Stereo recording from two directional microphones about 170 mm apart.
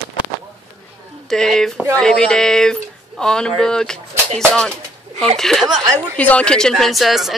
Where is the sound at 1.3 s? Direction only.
5° left (ahead or behind).